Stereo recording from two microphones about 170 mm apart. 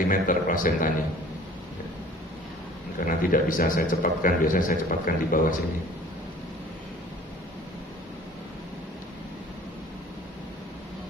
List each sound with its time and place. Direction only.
0.1 s a man's voice: 50° left (ahead or behind)
3.1 s a man's voice: 55° left (ahead or behind)